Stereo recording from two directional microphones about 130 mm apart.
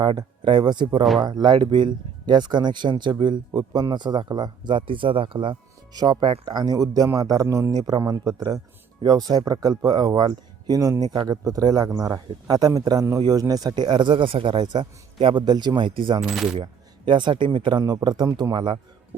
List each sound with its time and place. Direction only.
0.0 s speech: 35° right (ahead or behind)
1.0 s coin: centre (ahead or behind)
1.3 s a man's voice: 35° right (ahead or behind)
16.2 s coin: 5° right (ahead or behind)
17.1 s speech: 35° right (ahead or behind)